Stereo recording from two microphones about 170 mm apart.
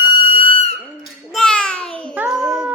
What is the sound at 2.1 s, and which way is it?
Child singing, 5° right (ahead or behind).